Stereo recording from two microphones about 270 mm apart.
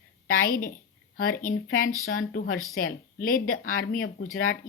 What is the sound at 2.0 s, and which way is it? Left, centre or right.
A woman's voice, left.